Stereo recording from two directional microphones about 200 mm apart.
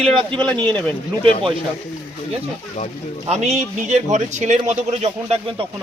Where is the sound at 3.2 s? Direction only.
35° right (ahead or behind).